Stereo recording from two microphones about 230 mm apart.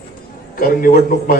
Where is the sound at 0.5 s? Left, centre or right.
Left.